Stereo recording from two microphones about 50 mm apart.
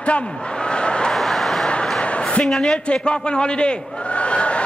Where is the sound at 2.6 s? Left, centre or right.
Centre.